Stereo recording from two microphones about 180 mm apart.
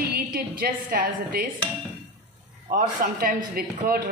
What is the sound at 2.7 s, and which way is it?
A man's voice, 50° right (ahead or behind).